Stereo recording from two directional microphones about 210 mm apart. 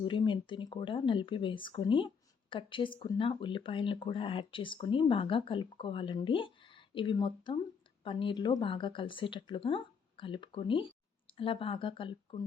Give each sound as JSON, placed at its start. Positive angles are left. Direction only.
{"t": 0.0, "sound": "speech", "side_deg": 20}